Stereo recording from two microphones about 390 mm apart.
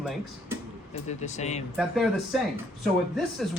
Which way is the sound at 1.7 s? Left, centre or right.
Centre.